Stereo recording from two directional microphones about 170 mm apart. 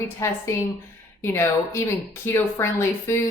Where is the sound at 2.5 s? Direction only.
15° left (ahead or behind).